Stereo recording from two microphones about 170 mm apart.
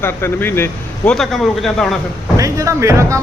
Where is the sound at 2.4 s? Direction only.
20° right (ahead or behind).